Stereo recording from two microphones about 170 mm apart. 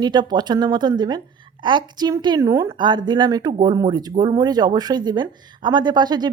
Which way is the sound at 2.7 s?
25° right (ahead or behind).